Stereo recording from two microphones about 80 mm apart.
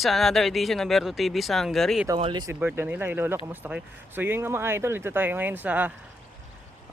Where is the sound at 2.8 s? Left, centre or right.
Right.